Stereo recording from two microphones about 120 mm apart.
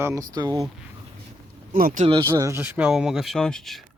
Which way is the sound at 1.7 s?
90° right.